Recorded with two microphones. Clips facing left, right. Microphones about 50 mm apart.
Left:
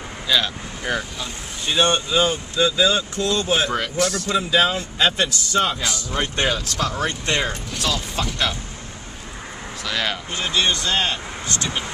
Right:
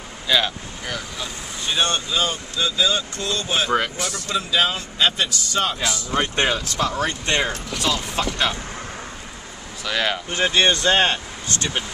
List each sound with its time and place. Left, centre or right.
0.3 s speech: centre
1.8 s speech: left
3.2 s speech: centre
3.7 s speech: centre
4.6 s speech: centre
5.8 s speech: centre
6.3 s speech: centre
9.8 s speech: centre
10.3 s speech: right